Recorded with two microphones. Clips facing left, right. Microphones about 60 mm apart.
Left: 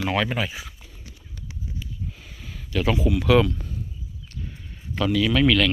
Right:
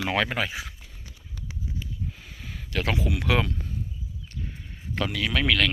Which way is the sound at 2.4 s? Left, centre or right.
Right.